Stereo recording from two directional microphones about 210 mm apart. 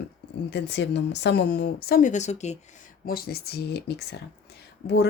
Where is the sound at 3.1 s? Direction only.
45° left (ahead or behind).